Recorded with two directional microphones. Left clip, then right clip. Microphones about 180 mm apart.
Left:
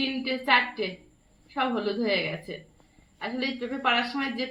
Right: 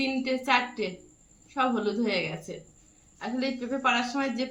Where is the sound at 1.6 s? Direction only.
50° right (ahead or behind).